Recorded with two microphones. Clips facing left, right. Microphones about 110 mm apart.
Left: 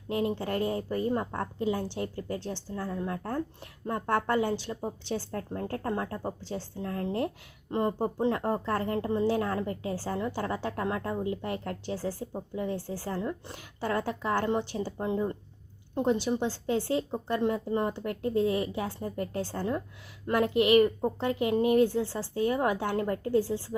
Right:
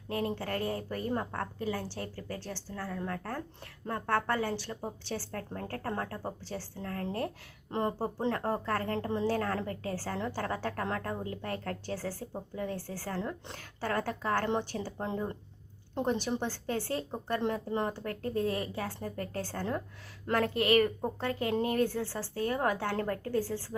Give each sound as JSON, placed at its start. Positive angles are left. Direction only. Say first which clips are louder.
{"t": 0.1, "sound": "a woman's voice", "louder": "left 4 dB", "side_deg": 20}